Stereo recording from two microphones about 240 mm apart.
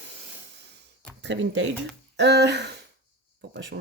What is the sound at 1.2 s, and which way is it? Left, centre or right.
Speech, right.